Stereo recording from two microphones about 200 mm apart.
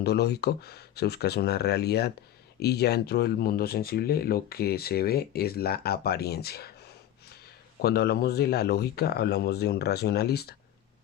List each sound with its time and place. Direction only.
0.0 s speech: 55° left (ahead or behind)
7.8 s speech: 50° left (ahead or behind)